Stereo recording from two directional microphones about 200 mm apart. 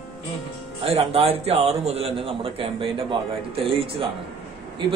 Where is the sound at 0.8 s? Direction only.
30° right (ahead or behind).